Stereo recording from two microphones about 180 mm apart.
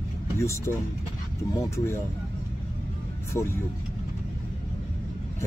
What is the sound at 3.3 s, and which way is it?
Speech, 15° left (ahead or behind).